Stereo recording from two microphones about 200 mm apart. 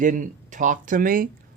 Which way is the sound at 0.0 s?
40° right (ahead or behind).